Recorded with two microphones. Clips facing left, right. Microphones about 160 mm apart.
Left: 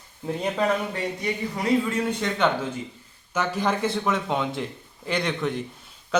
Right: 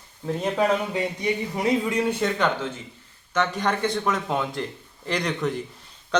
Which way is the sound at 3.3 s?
5° left (ahead or behind).